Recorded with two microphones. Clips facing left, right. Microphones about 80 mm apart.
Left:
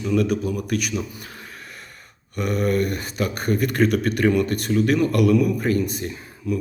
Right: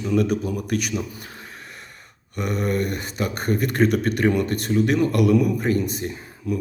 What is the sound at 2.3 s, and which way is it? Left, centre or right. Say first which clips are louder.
A man's voice: left 2 dB; right.